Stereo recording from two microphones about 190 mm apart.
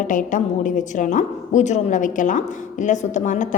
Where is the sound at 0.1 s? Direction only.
45° left (ahead or behind).